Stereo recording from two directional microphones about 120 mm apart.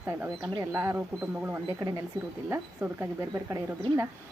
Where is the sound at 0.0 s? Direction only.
15° right (ahead or behind).